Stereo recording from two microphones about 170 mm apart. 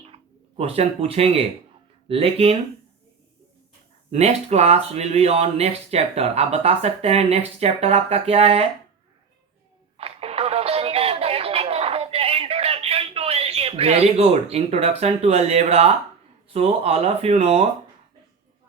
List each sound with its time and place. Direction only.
0.0 s speech: 35° right (ahead or behind)
4.1 s speech: 40° right (ahead or behind)
10.0 s a sound: 35° right (ahead or behind)
16.5 s speech: 35° right (ahead or behind)